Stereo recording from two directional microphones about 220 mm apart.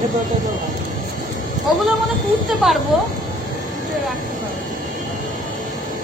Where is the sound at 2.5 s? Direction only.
Centre (ahead or behind).